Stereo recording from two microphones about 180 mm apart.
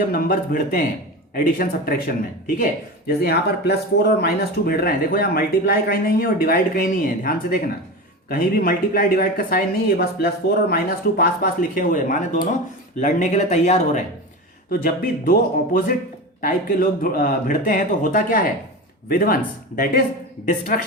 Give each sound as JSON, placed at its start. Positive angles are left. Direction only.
{"t": 0.1, "sound": "speech", "side_deg": 55}
{"t": 3.2, "sound": "speech", "side_deg": 60}
{"t": 14.7, "sound": "speech", "side_deg": 55}